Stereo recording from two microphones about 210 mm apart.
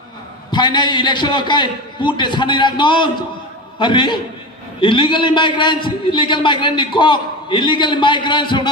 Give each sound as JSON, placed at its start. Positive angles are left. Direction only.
{"t": 0.5, "sound": "a man's voice", "side_deg": 20}